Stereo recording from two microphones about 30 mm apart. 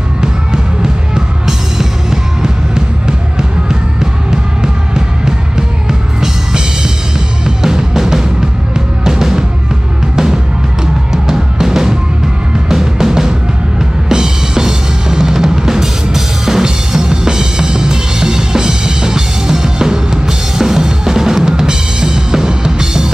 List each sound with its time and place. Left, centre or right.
0.2 s music: right
11.1 s music: centre
13.7 s drum kit: right